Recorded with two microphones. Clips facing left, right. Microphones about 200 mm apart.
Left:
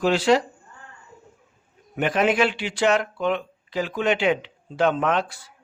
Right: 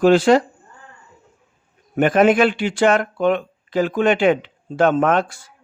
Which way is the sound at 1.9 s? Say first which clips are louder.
Right 7 dB; 50° right (ahead or behind).